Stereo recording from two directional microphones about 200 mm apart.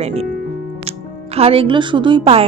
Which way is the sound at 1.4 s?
30° right (ahead or behind).